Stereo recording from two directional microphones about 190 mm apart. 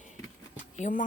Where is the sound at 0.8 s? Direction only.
40° left (ahead or behind).